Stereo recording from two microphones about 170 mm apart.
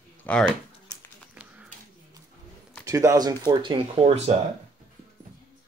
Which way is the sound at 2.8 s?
20° right (ahead or behind).